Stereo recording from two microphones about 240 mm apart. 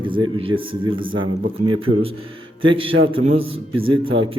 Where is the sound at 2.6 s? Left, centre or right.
Right.